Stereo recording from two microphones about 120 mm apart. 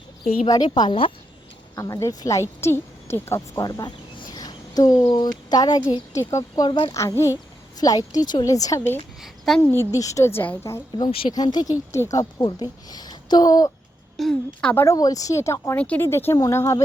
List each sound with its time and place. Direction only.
0.4 s a woman's voice: 35° left (ahead or behind)
1.7 s speech: 25° left (ahead or behind)
3.6 s a sound: 30° left (ahead or behind)
5.1 s a woman's voice: 35° left (ahead or behind)
6.7 s a woman's voice: 40° left (ahead or behind)
6.9 s a woman's voice: 25° left (ahead or behind)
9.5 s a woman's voice: 5° left (ahead or behind)
9.9 s speech: 25° left (ahead or behind)
10.9 s speech: 45° left (ahead or behind)
11.3 s a woman's voice: 35° left (ahead or behind)
12.9 s a sound: 35° left (ahead or behind)
14.2 s a woman's voice: 5° left (ahead or behind)
14.8 s speech: 30° left (ahead or behind)